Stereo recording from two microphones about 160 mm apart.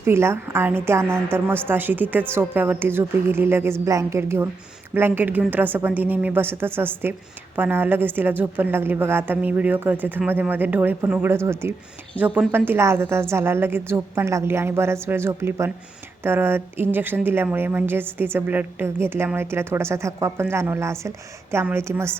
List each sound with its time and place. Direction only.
0.0 s a woman's voice: 15° right (ahead or behind)